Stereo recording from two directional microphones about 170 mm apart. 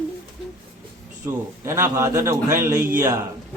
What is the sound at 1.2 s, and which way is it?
A man's voice, 15° right (ahead or behind).